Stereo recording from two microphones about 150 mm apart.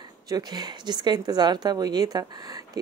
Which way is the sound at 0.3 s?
25° right (ahead or behind).